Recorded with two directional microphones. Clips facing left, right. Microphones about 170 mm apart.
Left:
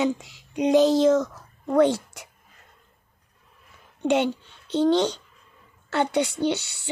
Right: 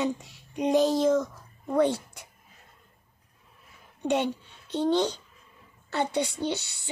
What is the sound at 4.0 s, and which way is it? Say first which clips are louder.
A woman's voice: left 4 dB; 80° left.